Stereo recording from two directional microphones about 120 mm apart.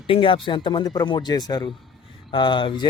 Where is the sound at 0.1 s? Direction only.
50° left (ahead or behind).